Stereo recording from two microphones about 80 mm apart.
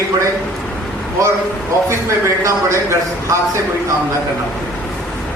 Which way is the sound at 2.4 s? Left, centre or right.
Right.